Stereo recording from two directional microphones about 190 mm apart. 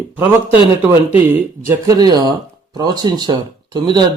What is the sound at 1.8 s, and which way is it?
Speech, 20° right (ahead or behind).